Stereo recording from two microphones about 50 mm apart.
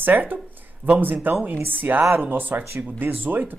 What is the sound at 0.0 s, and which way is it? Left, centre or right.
Speech, right.